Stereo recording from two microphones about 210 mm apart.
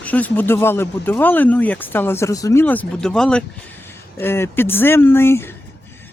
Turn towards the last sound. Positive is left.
turn(degrees=10)  # may be behind; listen again after turning